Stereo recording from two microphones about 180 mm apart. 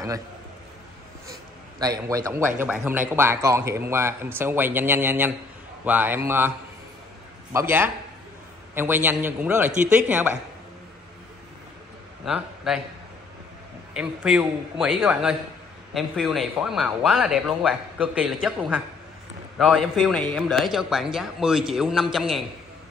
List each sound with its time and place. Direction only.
1.8 s a man's voice: 20° right (ahead or behind)
7.5 s a man's voice: 10° right (ahead or behind)
12.3 s speech: 5° right (ahead or behind)
13.9 s speech: 5° right (ahead or behind)